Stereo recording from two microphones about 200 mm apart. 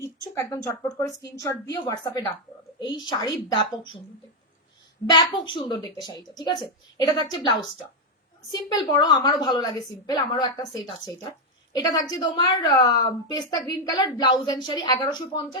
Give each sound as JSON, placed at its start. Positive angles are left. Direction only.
{"t": 0.0, "sound": "a woman's voice", "side_deg": 15}
{"t": 5.1, "sound": "a woman's voice", "side_deg": 25}
{"t": 8.5, "sound": "a woman's voice", "side_deg": 20}